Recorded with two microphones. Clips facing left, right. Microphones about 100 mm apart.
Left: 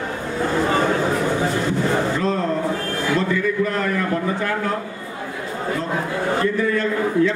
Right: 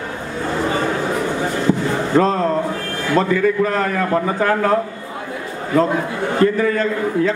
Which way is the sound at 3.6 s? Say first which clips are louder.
Right 3 dB; 40° right (ahead or behind).